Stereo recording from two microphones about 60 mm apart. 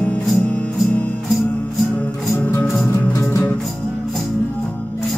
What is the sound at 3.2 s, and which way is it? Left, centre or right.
Music, left.